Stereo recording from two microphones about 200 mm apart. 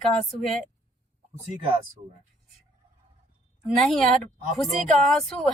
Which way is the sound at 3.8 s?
Centre (ahead or behind).